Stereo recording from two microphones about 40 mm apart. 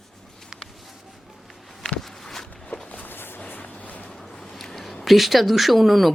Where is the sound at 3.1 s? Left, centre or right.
Left.